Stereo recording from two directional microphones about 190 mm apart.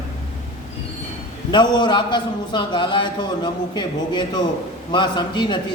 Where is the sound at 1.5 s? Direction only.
25° left (ahead or behind).